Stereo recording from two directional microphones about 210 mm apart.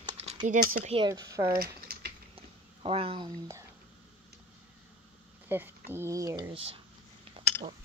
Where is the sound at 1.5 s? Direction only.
45° right (ahead or behind).